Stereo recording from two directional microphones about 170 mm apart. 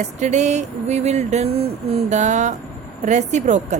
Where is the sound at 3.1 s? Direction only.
45° right (ahead or behind).